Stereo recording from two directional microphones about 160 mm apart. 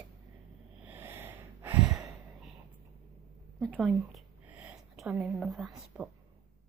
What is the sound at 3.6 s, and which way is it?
A woman's voice, 5° left (ahead or behind).